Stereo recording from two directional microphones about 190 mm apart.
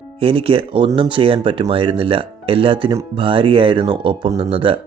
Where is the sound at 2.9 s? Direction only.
15° right (ahead or behind).